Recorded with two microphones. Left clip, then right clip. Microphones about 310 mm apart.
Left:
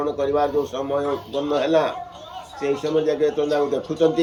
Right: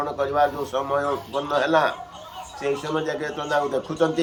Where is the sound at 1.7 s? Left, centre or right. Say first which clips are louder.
Even; right.